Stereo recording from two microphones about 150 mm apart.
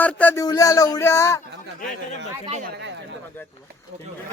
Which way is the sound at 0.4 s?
25° left (ahead or behind).